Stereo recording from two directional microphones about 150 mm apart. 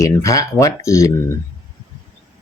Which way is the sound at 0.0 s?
20° left (ahead or behind).